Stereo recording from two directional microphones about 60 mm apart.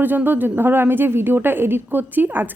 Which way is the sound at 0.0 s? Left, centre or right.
Right.